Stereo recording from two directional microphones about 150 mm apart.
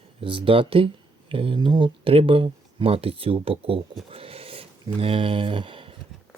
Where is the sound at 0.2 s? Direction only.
35° right (ahead or behind).